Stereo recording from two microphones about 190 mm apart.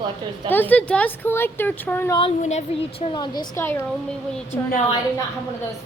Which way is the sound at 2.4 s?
35° left (ahead or behind).